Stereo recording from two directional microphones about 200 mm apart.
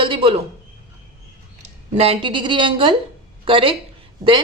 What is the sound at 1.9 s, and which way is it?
A woman's voice, 30° right (ahead or behind).